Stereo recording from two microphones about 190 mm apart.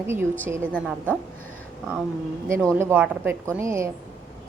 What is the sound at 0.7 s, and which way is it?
Speech, 5° left (ahead or behind).